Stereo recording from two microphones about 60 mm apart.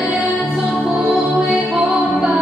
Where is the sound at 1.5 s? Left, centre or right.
Right.